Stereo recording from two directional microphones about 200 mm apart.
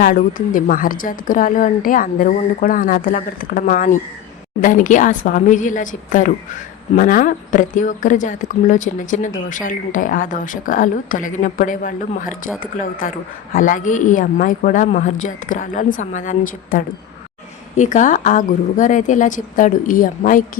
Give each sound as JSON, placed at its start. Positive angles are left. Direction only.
{"t": 0.0, "sound": "a woman's voice", "side_deg": 45}